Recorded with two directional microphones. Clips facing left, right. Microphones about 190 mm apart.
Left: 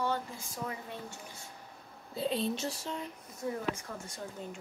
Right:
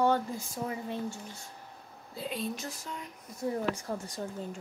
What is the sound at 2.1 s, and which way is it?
Speech, 25° left (ahead or behind).